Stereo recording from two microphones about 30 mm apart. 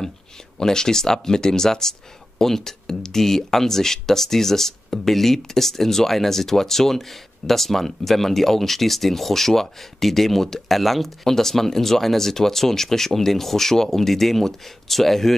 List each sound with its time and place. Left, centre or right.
0.6 s speech: centre
11.2 s speech: centre